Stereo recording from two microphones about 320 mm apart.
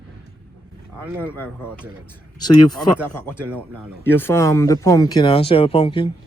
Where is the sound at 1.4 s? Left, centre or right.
Centre.